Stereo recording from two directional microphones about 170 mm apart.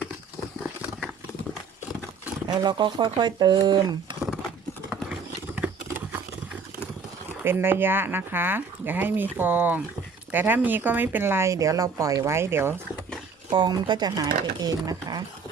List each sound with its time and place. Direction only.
2.6 s speech: 25° right (ahead or behind)
5.5 s patter: 10° right (ahead or behind)
7.4 s speech: 15° right (ahead or behind)
13.5 s speech: 25° right (ahead or behind)